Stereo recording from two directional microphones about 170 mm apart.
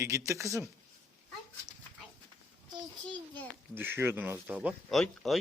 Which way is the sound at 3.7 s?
15° right (ahead or behind).